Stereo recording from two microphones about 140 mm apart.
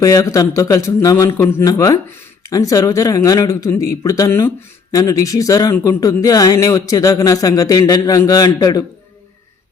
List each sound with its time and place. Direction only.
0.0 s a man's voice: 25° left (ahead or behind)